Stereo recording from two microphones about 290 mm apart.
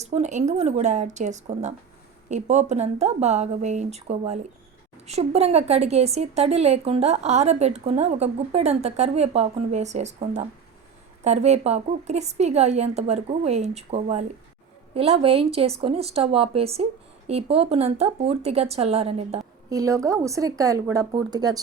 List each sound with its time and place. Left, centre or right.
0.0 s speech: right